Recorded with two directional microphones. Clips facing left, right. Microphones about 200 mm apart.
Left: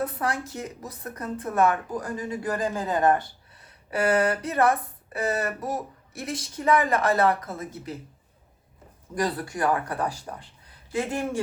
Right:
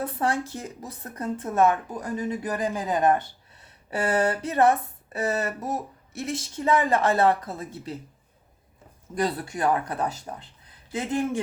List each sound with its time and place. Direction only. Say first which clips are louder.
0.0 s speech: right 2 dB; 30° right (ahead or behind)
3.9 s speech: left 1 dB; 30° right (ahead or behind)
9.1 s speech: even; 25° right (ahead or behind)